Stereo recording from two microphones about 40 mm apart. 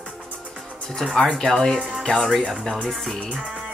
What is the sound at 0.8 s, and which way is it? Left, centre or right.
Speech, centre.